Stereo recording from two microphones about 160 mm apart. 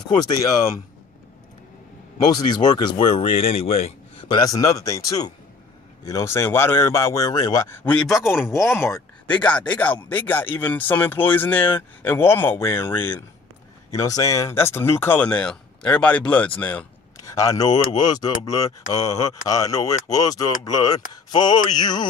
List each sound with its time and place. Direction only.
0.3 s speech: 20° left (ahead or behind)
2.2 s speech: 25° left (ahead or behind)
4.4 s speech: 20° left (ahead or behind)
7.9 s a man's voice: centre (ahead or behind)
8.5 s speech: 15° left (ahead or behind)
17.2 s speech: 20° left (ahead or behind)